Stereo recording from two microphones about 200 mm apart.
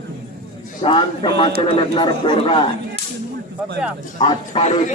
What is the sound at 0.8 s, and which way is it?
Speech, 25° left (ahead or behind).